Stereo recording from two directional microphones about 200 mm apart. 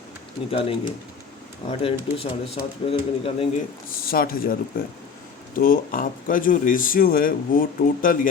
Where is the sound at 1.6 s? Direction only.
30° left (ahead or behind).